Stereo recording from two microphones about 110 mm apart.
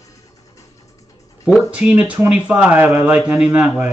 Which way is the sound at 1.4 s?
10° right (ahead or behind).